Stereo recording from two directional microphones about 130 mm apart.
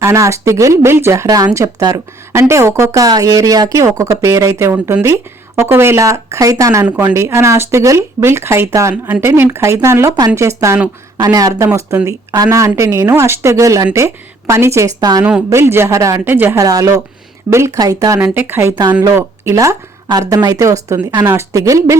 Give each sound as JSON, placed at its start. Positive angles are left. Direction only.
{"t": 0.0, "sound": "speech", "side_deg": -25}
{"t": 15.2, "sound": "speech", "side_deg": -10}
{"t": 18.2, "sound": "speech", "side_deg": -15}